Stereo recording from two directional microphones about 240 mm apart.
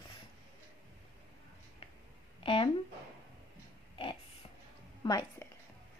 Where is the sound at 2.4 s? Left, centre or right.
Left.